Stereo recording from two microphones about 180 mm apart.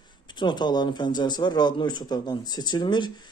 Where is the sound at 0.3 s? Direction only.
25° left (ahead or behind).